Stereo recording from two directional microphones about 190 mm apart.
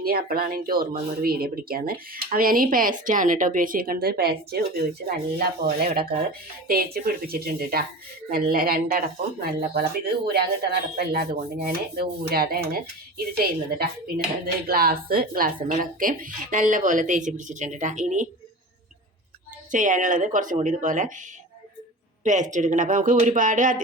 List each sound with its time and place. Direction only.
0.0 s speech: 50° right (ahead or behind)
19.7 s speech: 40° right (ahead or behind)
22.2 s speech: 40° right (ahead or behind)